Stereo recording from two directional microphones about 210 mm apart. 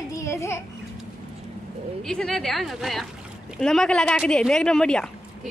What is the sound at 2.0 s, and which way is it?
Speech, centre (ahead or behind).